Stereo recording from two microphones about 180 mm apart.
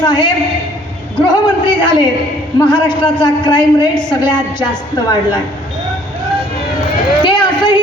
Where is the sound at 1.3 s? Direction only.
25° left (ahead or behind).